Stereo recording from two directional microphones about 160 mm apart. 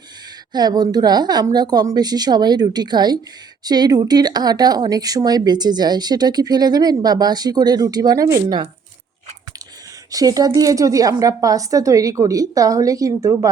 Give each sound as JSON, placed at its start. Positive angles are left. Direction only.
{"t": 0.5, "sound": "speech", "side_deg": -25}
{"t": 10.1, "sound": "speech", "side_deg": -20}